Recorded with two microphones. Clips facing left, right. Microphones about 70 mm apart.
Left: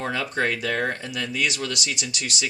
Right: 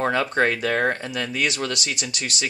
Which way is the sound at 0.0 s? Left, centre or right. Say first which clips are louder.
Right 5 dB; right.